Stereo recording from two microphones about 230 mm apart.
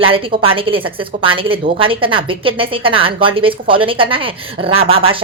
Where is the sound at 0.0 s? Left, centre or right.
Right.